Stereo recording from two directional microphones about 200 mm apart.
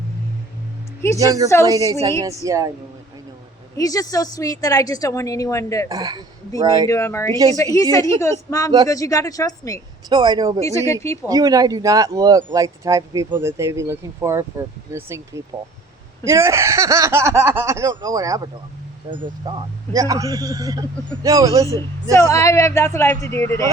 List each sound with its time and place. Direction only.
1.2 s speech: 15° right (ahead or behind)
3.8 s a woman's voice: 15° left (ahead or behind)
5.9 s speech: 20° right (ahead or behind)
6.8 s a woman's voice: 15° left (ahead or behind)
10.1 s speech: 20° right (ahead or behind)
10.7 s a woman's voice: 15° left (ahead or behind)
11.2 s speech: 15° right (ahead or behind)
22.1 s a woman's voice: 15° left (ahead or behind)